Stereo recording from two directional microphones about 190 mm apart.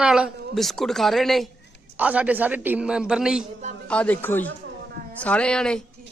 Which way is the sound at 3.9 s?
5° left (ahead or behind).